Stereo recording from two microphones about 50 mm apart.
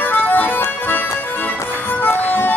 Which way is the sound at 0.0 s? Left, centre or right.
Left.